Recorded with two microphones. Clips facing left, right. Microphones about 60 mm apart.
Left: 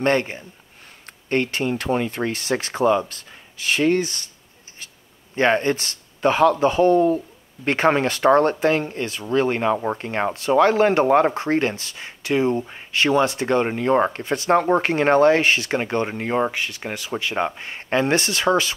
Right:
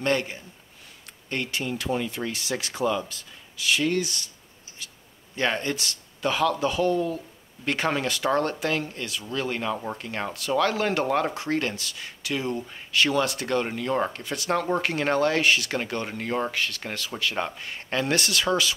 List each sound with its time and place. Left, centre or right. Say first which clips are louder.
0.0 s speech: left 5 dB; left
5.3 s speech: left 8 dB; left